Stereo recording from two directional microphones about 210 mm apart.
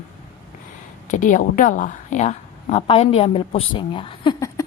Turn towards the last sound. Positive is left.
turn(degrees=20)  # may be behind; listen again after turning